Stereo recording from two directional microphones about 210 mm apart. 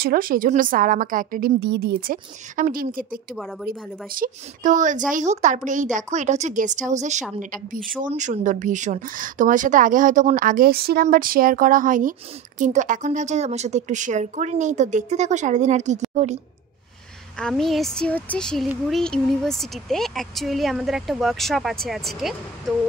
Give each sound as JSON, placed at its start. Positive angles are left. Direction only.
{"t": 0.0, "sound": "a woman's voice", "side_deg": -45}
{"t": 17.4, "sound": "speech", "side_deg": 0}